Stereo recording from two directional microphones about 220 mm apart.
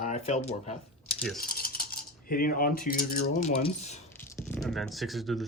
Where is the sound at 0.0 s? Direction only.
30° left (ahead or behind).